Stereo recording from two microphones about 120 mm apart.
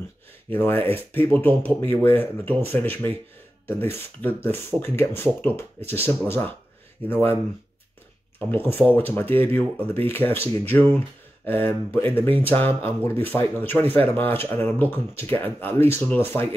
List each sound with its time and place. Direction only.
0.5 s speech: 15° left (ahead or behind)
8.4 s speech: 15° left (ahead or behind)